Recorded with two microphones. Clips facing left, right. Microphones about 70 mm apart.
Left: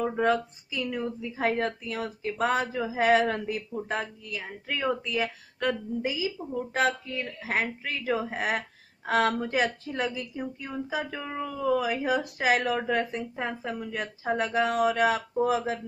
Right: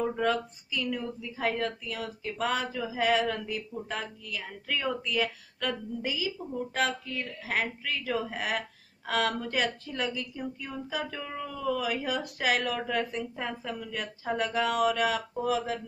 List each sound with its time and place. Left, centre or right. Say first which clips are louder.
0.1 s a woman's voice: left 3 dB; left
10.6 s a sound: left 4 dB; centre
11.3 s a woman's voice: left 5 dB; left